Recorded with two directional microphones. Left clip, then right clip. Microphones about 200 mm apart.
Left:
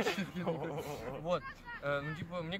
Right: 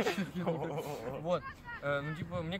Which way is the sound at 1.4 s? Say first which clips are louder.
Right 1 dB; 55° left (ahead or behind).